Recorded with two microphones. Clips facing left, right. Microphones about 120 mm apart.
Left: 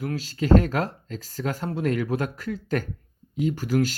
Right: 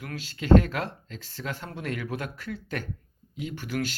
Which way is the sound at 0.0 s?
35° left (ahead or behind).